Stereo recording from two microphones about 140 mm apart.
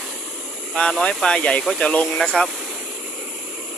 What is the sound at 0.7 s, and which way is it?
Speech, 5° left (ahead or behind).